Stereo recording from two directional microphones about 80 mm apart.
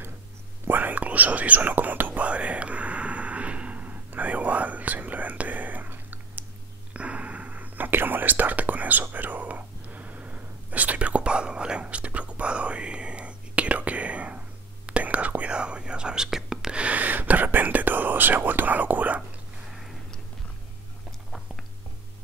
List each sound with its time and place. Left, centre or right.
0.7 s whispering: right